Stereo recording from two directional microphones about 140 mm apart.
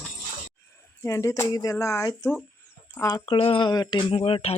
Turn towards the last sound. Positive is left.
turn(degrees=40)  # may be behind; listen again after turning